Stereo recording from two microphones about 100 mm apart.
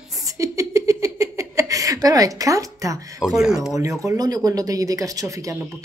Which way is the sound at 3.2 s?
5° right (ahead or behind).